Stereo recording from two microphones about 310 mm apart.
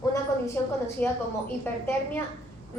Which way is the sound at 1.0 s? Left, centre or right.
Centre.